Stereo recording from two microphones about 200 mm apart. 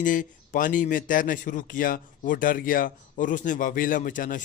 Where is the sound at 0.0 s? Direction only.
40° left (ahead or behind).